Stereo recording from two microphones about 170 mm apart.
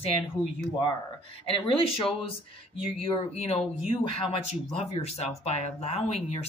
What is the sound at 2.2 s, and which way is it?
Speech, 35° left (ahead or behind).